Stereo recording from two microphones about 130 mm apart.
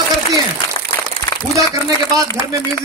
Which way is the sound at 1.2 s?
25° left (ahead or behind).